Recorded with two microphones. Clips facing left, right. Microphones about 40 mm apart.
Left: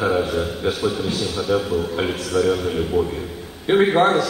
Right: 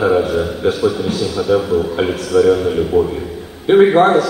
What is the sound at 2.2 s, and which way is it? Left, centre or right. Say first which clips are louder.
Speech: right 8 dB; right.